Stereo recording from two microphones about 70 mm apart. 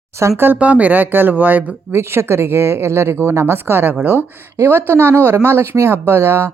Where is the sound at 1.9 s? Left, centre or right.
Right.